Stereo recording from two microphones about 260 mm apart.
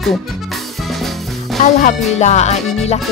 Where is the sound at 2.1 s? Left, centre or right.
Left.